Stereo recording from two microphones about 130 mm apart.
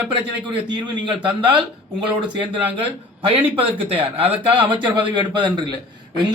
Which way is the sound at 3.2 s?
45° right (ahead or behind).